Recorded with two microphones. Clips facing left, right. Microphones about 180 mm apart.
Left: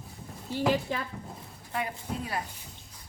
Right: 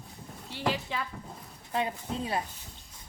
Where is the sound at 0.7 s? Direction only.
45° left (ahead or behind).